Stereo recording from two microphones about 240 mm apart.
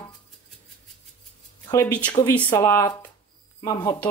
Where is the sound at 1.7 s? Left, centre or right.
Centre.